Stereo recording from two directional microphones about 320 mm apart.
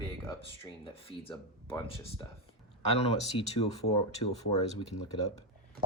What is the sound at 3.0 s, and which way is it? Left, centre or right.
Speech, centre.